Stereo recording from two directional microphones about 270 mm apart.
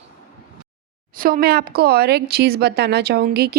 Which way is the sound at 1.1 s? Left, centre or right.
Right.